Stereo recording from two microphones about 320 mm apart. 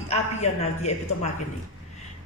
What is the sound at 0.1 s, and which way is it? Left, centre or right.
Speech, left.